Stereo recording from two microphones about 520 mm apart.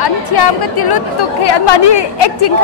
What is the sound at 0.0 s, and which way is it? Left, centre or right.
A woman's voice, left.